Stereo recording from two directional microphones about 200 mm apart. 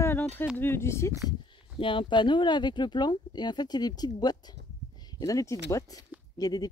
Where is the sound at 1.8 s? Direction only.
25° left (ahead or behind).